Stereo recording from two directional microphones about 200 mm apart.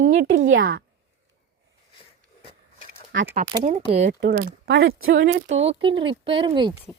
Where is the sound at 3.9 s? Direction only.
35° right (ahead or behind).